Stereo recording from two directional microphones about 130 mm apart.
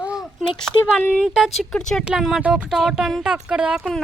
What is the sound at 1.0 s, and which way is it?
Speech, 5° left (ahead or behind).